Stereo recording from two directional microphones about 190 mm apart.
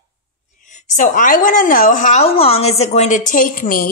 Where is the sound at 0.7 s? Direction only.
40° left (ahead or behind).